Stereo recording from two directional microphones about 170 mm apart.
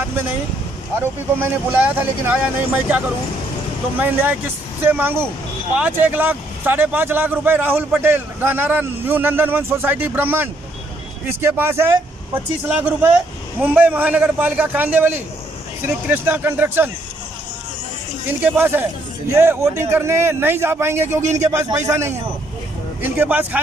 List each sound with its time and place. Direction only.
0.9 s speech: 10° right (ahead or behind)
18.4 s speech: 10° right (ahead or behind)